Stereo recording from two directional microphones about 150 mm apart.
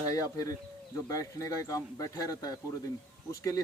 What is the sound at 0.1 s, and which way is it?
Speech, 25° left (ahead or behind).